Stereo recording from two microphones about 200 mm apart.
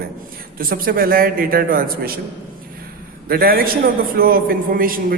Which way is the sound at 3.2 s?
50° right (ahead or behind).